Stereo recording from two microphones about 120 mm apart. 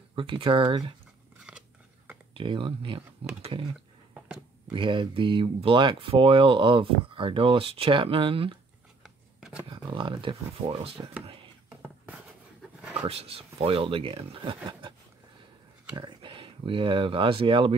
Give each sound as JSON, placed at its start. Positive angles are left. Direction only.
{"t": 0.1, "sound": "speech", "side_deg": -45}
{"t": 1.5, "sound": "a sound", "side_deg": -10}
{"t": 2.3, "sound": "speech", "side_deg": -45}
{"t": 4.6, "sound": "speech", "side_deg": -45}
{"t": 9.0, "sound": "shuffling cards", "side_deg": -5}
{"t": 9.7, "sound": "speech", "side_deg": -45}
{"t": 13.0, "sound": "speech", "side_deg": -55}
{"t": 16.0, "sound": "speech", "side_deg": -40}